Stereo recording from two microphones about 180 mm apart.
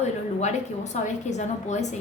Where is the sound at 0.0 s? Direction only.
40° left (ahead or behind).